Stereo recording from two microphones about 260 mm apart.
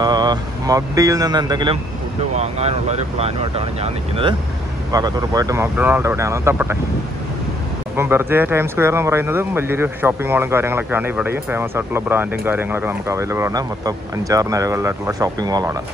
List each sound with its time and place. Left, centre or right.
0.0 s speech: centre
7.9 s speech: centre